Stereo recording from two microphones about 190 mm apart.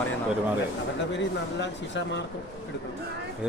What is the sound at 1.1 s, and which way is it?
Speech, 70° left (ahead or behind).